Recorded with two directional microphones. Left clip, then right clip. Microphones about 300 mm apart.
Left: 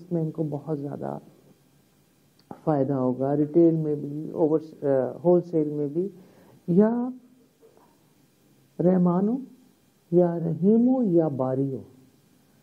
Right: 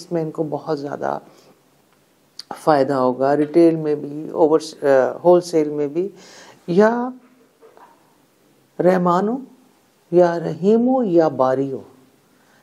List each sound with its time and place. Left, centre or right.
0.0 s speech: centre
2.3 s speech: centre
4.0 s speech: right
4.6 s speech: centre
5.4 s speech: centre
8.7 s speech: centre